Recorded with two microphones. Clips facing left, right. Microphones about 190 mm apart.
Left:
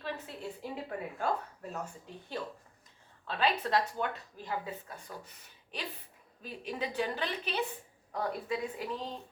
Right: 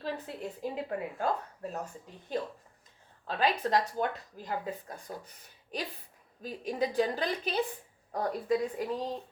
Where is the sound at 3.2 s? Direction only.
40° right (ahead or behind).